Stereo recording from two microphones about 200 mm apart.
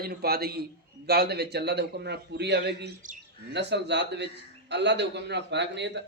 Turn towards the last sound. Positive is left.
turn(degrees=-60)  # may be behind; listen again after turning